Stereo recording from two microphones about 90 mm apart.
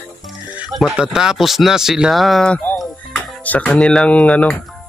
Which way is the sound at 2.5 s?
20° left (ahead or behind).